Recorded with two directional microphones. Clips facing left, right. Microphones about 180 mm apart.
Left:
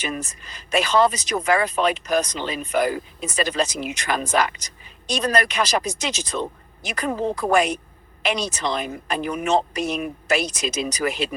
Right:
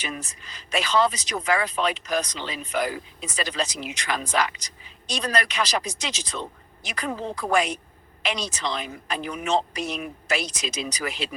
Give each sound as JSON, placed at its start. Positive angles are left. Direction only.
{"t": 0.0, "sound": "speech", "side_deg": 45}